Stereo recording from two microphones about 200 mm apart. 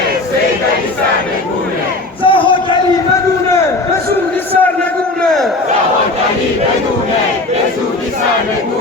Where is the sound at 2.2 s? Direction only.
25° left (ahead or behind).